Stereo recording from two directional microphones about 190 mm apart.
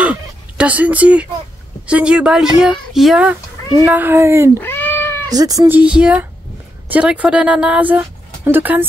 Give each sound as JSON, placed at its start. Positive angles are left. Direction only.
{"t": 0.0, "sound": "fowl", "side_deg": -5}
{"t": 1.9, "sound": "speech", "side_deg": -5}
{"t": 4.6, "sound": "cat", "side_deg": 10}
{"t": 5.3, "sound": "speech", "side_deg": -20}
{"t": 5.8, "sound": "speech", "side_deg": -5}